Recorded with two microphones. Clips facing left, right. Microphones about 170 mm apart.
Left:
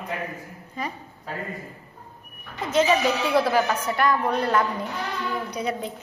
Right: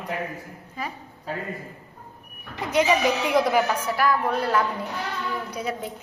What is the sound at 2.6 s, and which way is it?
A woman's voice, 15° right (ahead or behind).